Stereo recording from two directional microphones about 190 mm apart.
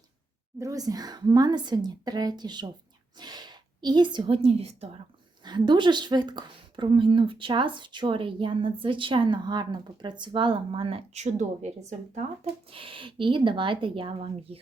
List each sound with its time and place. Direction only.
0.6 s a woman's voice: 20° right (ahead or behind); by 12.2 s 40° right (ahead or behind)
12.7 s a woman's voice: 30° right (ahead or behind)